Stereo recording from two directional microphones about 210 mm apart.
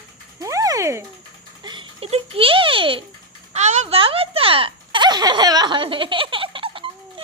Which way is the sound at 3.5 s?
30° right (ahead or behind).